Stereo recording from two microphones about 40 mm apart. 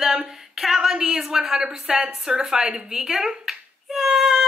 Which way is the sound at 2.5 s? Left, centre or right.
Centre.